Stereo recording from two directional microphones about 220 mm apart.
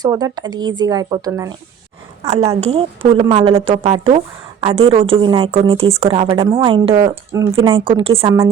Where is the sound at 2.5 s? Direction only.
25° right (ahead or behind).